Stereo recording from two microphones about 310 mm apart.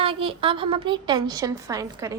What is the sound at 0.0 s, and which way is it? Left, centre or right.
A woman's voice, centre.